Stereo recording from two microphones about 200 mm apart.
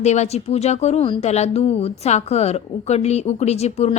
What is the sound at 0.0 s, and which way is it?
Speech, 35° left (ahead or behind).